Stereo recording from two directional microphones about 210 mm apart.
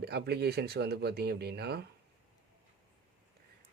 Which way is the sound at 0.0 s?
50° right (ahead or behind).